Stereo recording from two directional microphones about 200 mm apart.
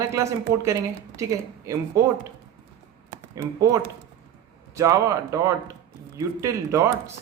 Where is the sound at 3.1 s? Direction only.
15° right (ahead or behind).